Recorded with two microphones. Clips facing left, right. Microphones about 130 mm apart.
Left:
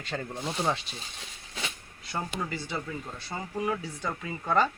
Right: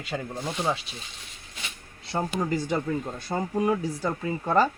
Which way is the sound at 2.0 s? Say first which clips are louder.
Right 6 dB; 35° right (ahead or behind).